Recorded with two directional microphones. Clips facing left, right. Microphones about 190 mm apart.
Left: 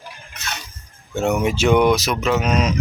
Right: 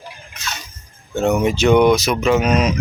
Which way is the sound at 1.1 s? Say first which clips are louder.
Right 3 dB; 10° left (ahead or behind).